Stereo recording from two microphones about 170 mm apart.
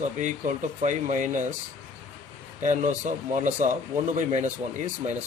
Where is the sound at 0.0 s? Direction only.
45° right (ahead or behind).